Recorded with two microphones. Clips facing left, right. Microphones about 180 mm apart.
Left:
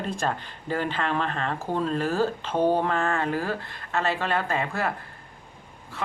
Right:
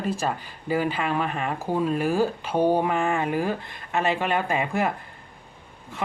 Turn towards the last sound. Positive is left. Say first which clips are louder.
# right 2 dB
turn(degrees=-20)  # may be behind; listen again after turning